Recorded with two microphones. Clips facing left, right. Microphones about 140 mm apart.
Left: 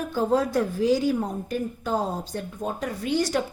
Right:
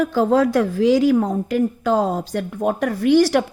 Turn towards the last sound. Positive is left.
turn(degrees=-75)  # may be behind; listen again after turning